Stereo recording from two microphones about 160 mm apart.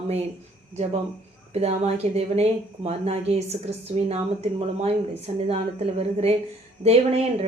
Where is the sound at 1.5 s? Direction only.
40° right (ahead or behind).